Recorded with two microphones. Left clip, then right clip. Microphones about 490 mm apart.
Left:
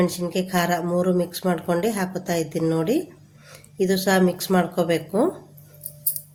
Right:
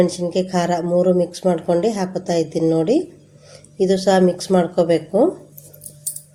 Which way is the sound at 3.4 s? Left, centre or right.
Left.